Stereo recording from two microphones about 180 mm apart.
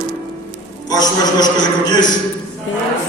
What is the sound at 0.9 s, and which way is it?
A man's voice, 20° left (ahead or behind).